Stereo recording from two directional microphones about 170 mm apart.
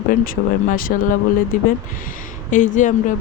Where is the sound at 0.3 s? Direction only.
55° left (ahead or behind).